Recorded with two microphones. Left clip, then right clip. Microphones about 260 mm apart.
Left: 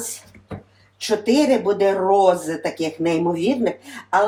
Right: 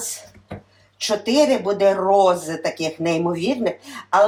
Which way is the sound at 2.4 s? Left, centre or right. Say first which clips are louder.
Even; centre.